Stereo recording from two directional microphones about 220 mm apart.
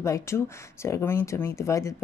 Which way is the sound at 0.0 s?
15° left (ahead or behind).